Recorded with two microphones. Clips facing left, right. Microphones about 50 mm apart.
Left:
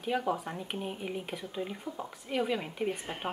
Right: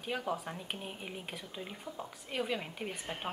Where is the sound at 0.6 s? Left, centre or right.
Centre.